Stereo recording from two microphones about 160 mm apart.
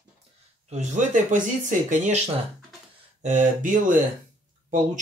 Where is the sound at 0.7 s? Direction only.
50° right (ahead or behind).